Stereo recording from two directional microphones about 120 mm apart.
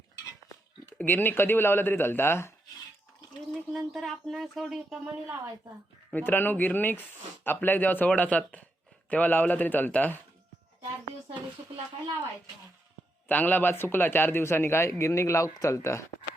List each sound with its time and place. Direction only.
0.9 s speech: 15° left (ahead or behind)
3.5 s speech: centre (ahead or behind)
6.1 s speech: 15° left (ahead or behind)
13.2 s a man's voice: 15° left (ahead or behind)